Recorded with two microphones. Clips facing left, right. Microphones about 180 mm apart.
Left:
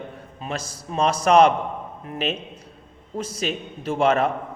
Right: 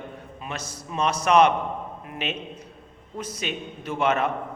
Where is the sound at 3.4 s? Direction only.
35° left (ahead or behind).